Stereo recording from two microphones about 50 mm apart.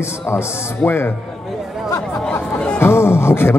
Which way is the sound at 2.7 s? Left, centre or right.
Left.